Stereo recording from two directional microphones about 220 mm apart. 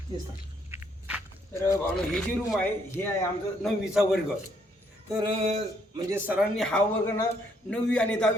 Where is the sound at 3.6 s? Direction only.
Centre (ahead or behind).